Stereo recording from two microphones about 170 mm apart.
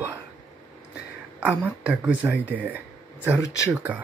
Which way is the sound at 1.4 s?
10° right (ahead or behind).